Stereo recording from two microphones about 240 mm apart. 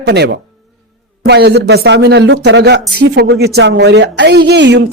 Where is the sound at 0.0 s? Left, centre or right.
Right.